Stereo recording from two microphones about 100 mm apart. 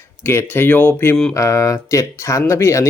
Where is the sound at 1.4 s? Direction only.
35° left (ahead or behind).